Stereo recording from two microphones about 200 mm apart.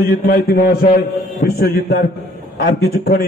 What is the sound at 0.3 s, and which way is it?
Speech, 50° left (ahead or behind).